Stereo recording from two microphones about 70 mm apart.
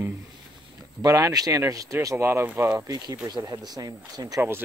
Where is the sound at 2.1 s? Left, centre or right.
Right.